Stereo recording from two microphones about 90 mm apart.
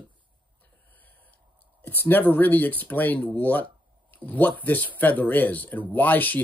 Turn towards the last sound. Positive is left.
turn(degrees=20)  # may be behind; listen again after turning